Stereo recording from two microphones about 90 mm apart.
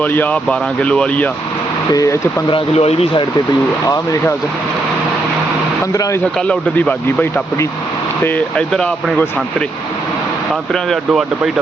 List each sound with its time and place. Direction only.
0.0 s speech: 20° left (ahead or behind)
1.9 s speech: 40° left (ahead or behind)
2.5 s speech: 80° left
3.8 s speech: 40° left (ahead or behind)
6.5 s speech: 15° left (ahead or behind)
8.5 s speech: 5° left (ahead or behind)
11.1 s speech: 5° right (ahead or behind)